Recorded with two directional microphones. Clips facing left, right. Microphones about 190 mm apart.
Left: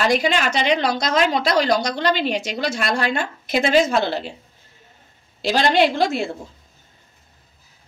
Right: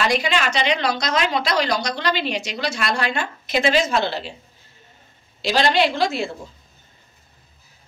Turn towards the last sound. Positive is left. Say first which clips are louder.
# left 2 dB
turn(degrees=50)  # may be behind; listen again after turning